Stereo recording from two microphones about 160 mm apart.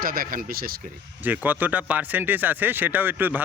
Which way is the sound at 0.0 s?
65° right (ahead or behind).